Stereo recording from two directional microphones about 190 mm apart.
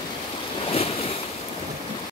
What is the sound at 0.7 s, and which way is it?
Waves, 30° left (ahead or behind).